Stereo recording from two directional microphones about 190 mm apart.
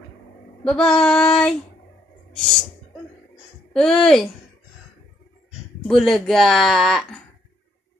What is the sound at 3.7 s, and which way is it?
Speech, 5° left (ahead or behind).